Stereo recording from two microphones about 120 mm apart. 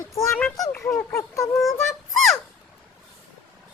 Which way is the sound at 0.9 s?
25° left (ahead or behind).